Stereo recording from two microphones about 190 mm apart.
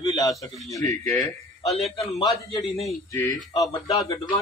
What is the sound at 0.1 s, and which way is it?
A man's voice, 20° left (ahead or behind).